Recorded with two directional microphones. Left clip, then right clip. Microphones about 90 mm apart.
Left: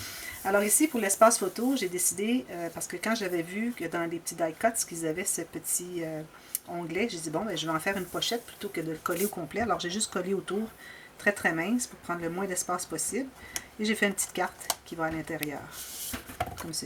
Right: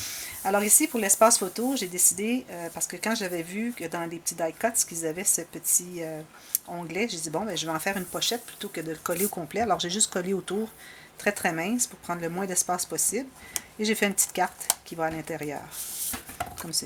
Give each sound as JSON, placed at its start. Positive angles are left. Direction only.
{"t": 0.4, "sound": "speech", "side_deg": -25}